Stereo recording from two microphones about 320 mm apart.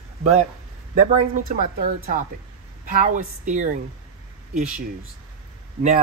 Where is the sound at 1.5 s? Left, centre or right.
Right.